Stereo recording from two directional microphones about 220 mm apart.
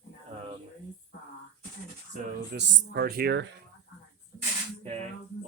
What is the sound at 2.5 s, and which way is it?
Speech, 50° right (ahead or behind).